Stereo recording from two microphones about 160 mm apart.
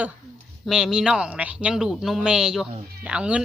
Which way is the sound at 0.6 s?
5° right (ahead or behind).